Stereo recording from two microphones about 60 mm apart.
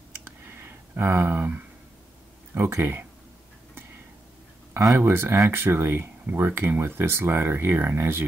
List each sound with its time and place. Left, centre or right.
0.2 s clicking: right
2.5 s speech: right
4.7 s speech: right